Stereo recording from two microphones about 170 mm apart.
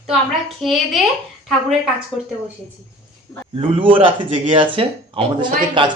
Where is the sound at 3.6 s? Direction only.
30° right (ahead or behind).